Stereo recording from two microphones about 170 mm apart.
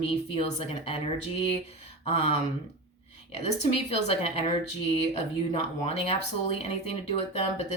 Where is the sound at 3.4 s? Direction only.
40° left (ahead or behind).